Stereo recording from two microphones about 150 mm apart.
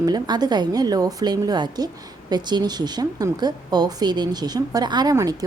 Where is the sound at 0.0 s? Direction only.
25° right (ahead or behind).